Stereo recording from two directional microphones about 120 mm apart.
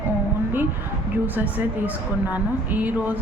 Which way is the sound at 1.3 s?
15° right (ahead or behind).